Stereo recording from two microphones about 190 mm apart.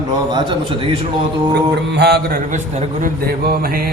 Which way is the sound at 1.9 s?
60° right (ahead or behind).